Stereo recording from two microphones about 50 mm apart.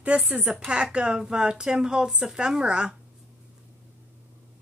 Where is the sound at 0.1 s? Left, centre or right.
Right.